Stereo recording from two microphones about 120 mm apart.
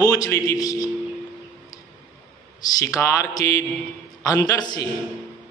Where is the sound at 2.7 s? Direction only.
25° left (ahead or behind).